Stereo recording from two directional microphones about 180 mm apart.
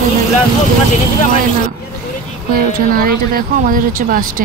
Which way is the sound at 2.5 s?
55° right (ahead or behind).